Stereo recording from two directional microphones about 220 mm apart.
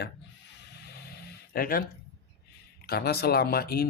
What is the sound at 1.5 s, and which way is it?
Speech, 40° left (ahead or behind).